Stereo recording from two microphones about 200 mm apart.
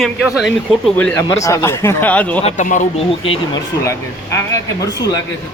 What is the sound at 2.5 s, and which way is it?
Speech, 40° left (ahead or behind).